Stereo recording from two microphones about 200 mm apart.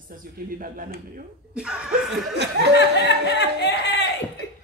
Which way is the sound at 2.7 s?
60° left (ahead or behind).